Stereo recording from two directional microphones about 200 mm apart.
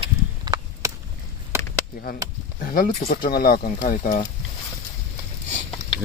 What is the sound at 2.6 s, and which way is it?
Speech, 45° left (ahead or behind).